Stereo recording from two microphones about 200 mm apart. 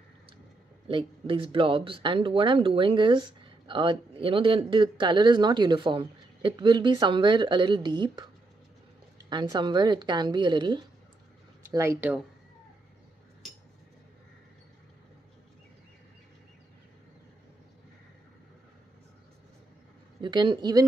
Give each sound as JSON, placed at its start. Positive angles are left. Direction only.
{"t": 0.8, "sound": "speech", "side_deg": -25}
{"t": 9.3, "sound": "speech", "side_deg": -20}
{"t": 20.2, "sound": "speech", "side_deg": -25}